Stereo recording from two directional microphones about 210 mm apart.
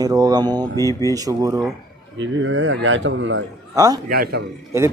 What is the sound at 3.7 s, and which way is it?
Speech, 15° right (ahead or behind).